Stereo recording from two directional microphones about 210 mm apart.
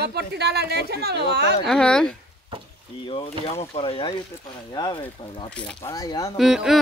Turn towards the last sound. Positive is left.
turn(degrees=0)  # may be behind; listen again after turning